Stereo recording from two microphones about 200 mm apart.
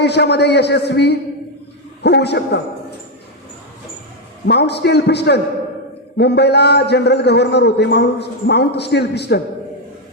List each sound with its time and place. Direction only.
0.0 s a man's voice: 55° left (ahead or behind)
4.4 s a man's voice: 55° left (ahead or behind)